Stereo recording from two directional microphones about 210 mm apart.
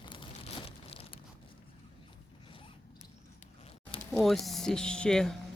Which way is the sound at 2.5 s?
25° left (ahead or behind).